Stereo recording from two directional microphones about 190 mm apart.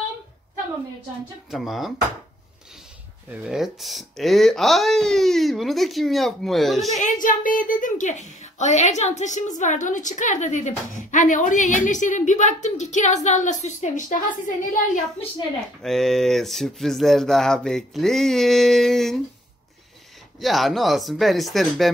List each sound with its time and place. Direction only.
1.5 s speech: centre (ahead or behind)
3.4 s speech: centre (ahead or behind)
6.9 s a woman's voice: 40° left (ahead or behind)
15.8 s speech: centre (ahead or behind)
20.3 s speech: centre (ahead or behind)